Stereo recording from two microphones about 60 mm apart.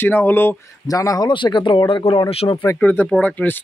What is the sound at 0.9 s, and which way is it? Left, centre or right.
Speech, left.